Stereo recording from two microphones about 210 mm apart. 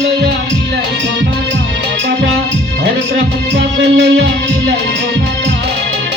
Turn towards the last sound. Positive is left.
turn(degrees=-60)  # may be behind; listen again after turning